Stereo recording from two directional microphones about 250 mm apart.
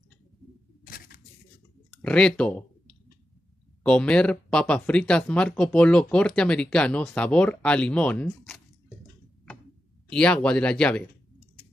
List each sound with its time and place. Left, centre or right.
0.8 s a sound: left
2.0 s speech: centre
10.0 s speech: centre